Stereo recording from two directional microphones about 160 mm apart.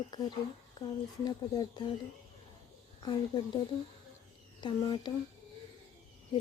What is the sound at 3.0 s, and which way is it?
Speech, 30° left (ahead or behind).